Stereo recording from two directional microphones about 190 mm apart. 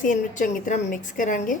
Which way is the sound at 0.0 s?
40° left (ahead or behind).